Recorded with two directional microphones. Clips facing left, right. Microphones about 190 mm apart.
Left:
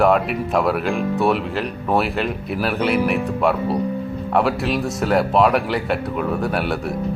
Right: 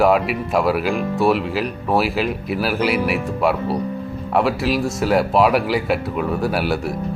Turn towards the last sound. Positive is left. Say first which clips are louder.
# right 1 dB
turn(degrees=0)  # may be behind; listen again after turning